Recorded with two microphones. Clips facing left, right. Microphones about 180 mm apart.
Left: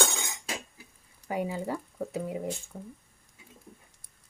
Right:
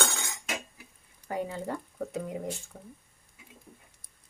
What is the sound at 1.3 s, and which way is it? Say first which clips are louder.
Speech: left 2 dB; 10° left (ahead or behind).